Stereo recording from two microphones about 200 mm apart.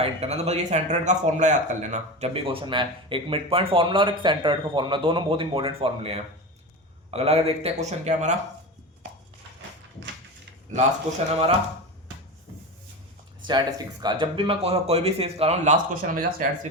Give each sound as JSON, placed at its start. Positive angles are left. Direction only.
{"t": 0.0, "sound": "a man's voice", "side_deg": -30}
{"t": 13.5, "sound": "speech", "side_deg": -20}